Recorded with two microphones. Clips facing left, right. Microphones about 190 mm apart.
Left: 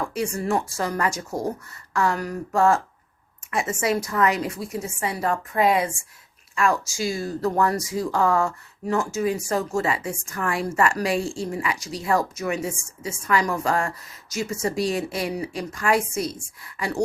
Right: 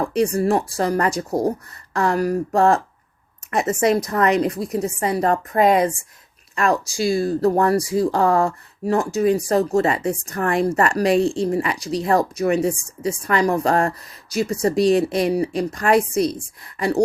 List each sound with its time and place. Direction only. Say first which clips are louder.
0.0 s speech: right 7 dB; 35° right (ahead or behind)
11.2 s speech: right 8 dB; 20° right (ahead or behind)
11.4 s speech: right 6 dB; 35° right (ahead or behind)